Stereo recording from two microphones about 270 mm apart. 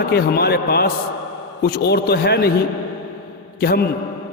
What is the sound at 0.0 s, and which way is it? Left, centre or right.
A man's voice, left.